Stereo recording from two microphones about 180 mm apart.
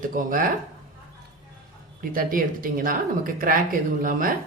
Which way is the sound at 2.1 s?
50° right (ahead or behind).